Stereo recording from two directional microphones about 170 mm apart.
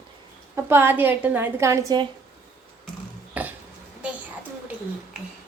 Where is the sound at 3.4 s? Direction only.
10° right (ahead or behind).